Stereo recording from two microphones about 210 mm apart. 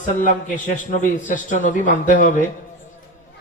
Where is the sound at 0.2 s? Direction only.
40° left (ahead or behind).